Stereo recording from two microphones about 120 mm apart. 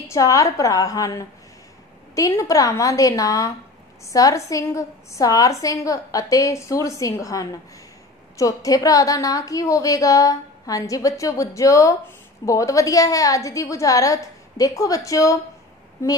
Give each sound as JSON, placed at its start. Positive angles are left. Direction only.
{"t": 0.1, "sound": "a woman's voice", "side_deg": 25}